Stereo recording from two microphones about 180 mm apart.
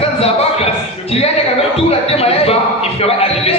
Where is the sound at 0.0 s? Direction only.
35° left (ahead or behind).